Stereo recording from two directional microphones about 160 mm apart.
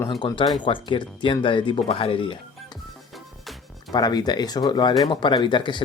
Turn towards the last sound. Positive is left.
turn(degrees=30)  # may be behind; listen again after turning